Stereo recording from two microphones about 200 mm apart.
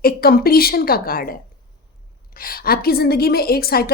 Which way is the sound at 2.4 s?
50° left (ahead or behind).